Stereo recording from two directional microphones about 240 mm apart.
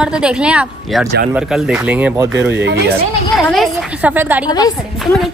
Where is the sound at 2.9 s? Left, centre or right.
Centre.